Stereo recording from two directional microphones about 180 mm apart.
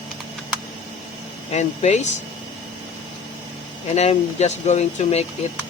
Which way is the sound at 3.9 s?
35° left (ahead or behind).